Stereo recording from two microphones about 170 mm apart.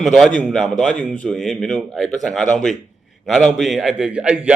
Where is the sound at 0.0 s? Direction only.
Centre (ahead or behind).